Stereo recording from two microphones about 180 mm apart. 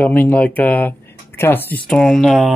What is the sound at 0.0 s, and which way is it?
Speech, 10° left (ahead or behind).